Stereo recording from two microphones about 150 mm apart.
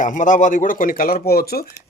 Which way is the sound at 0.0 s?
60° left (ahead or behind).